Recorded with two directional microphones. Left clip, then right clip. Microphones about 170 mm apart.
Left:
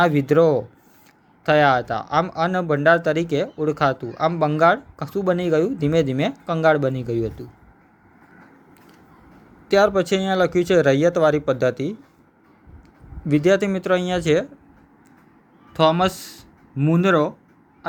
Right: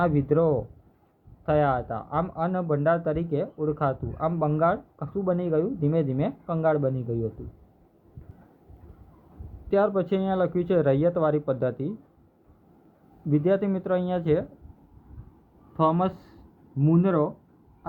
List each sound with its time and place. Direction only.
0.0 s speech: 30° left (ahead or behind)
9.6 s speech: 25° left (ahead or behind)
13.3 s speech: 30° left (ahead or behind)
15.7 s speech: 30° left (ahead or behind)